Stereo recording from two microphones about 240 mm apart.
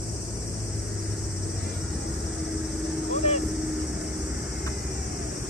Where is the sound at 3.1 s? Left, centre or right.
Left.